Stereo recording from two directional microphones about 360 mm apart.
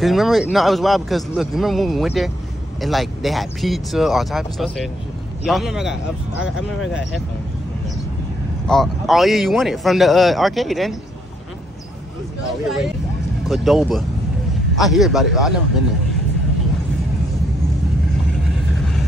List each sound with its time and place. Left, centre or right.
0.0 s speech: centre
6.3 s speech: left
8.6 s speech: centre
12.6 s speech: centre